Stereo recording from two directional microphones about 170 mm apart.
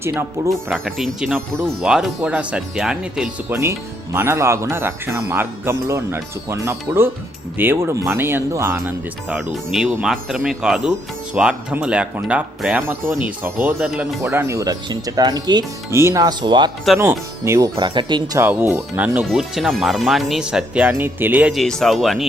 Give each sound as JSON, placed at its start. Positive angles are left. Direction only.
{"t": 0.0, "sound": "speech", "side_deg": -15}
{"t": 0.5, "sound": "speech", "side_deg": 0}
{"t": 3.5, "sound": "speech", "side_deg": -15}
{"t": 14.2, "sound": "speech", "side_deg": -15}
{"t": 17.0, "sound": "speech", "side_deg": -15}
{"t": 18.3, "sound": "speech", "side_deg": -15}
{"t": 21.5, "sound": "speech", "side_deg": 0}